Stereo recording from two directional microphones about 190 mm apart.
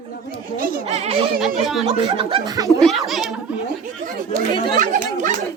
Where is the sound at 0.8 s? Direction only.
35° right (ahead or behind).